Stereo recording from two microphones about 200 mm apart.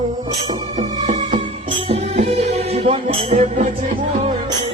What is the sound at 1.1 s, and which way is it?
Music, 30° right (ahead or behind).